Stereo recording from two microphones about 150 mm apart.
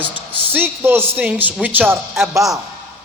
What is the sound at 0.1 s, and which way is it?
A woman's voice, 15° right (ahead or behind).